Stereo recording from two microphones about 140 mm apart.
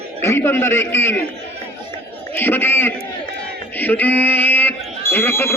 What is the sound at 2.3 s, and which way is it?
A man's voice, 15° left (ahead or behind).